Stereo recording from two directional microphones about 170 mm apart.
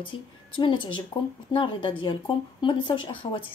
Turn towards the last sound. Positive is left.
turn(degrees=30)  # may be behind; listen again after turning